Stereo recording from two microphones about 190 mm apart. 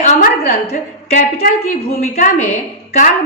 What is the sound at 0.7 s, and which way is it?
A woman's voice, 40° left (ahead or behind).